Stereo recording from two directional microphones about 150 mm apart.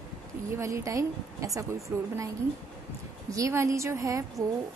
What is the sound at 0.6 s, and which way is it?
A woman's voice, 20° right (ahead or behind).